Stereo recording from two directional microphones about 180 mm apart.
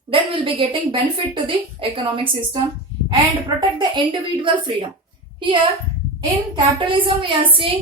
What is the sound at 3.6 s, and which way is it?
Speech, 25° right (ahead or behind).